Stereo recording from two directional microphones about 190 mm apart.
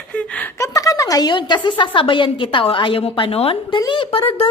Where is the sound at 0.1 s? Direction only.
5° left (ahead or behind); by 1.9 s 25° left (ahead or behind).